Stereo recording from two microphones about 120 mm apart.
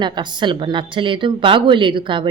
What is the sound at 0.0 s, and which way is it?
Speech, 40° right (ahead or behind).